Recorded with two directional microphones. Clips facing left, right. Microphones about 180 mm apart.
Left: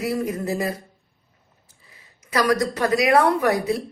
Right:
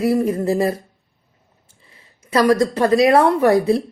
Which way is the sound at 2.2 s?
30° right (ahead or behind).